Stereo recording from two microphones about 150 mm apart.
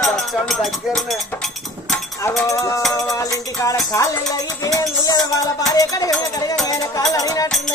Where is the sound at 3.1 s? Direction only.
25° left (ahead or behind).